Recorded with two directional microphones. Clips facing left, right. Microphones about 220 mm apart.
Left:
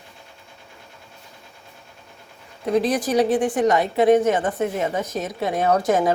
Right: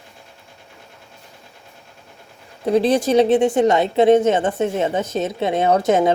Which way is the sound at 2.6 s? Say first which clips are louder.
Right 4 dB; 30° right (ahead or behind).